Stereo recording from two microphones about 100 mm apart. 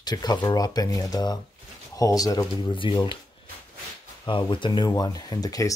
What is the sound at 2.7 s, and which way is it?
Speech, 55° left (ahead or behind).